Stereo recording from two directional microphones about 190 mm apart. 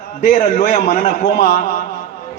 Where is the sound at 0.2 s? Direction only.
40° left (ahead or behind).